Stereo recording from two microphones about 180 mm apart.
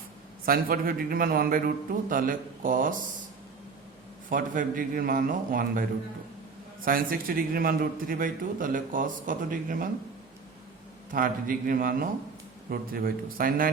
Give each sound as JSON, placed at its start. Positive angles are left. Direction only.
{"t": 0.4, "sound": "a man's voice", "side_deg": -55}
{"t": 4.3, "sound": "a man's voice", "side_deg": -50}
{"t": 6.8, "sound": "a man's voice", "side_deg": -50}
{"t": 11.1, "sound": "a man's voice", "side_deg": -50}